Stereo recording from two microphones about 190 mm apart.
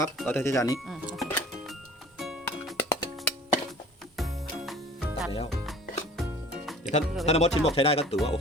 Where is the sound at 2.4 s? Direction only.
15° left (ahead or behind).